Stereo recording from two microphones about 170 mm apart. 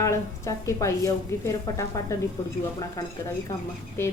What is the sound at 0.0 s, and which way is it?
Speech, 15° left (ahead or behind).